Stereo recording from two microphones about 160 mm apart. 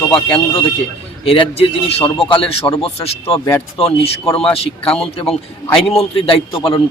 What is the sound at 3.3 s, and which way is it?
Speech, 20° left (ahead or behind).